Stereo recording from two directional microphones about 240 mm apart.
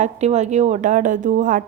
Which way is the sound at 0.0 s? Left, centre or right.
Right.